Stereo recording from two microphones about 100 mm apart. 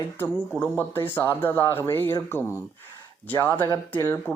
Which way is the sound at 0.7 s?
20° left (ahead or behind).